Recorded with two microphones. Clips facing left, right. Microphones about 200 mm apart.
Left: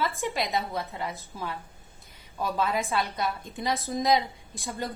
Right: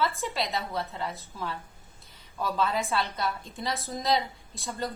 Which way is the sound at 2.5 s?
15° left (ahead or behind).